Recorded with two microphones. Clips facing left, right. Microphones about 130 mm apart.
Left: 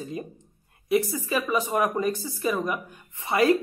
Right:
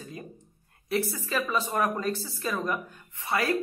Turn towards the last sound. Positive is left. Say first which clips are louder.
# left 6 dB
turn(degrees=20)  # may be behind; listen again after turning